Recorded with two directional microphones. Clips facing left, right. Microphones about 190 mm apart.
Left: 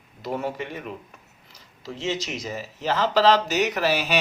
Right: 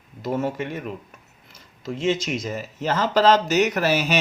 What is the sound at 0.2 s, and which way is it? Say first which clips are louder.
Speech: right 4 dB; 45° right (ahead or behind).